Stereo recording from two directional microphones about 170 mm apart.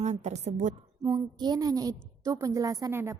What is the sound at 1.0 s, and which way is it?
A woman's voice, 20° right (ahead or behind).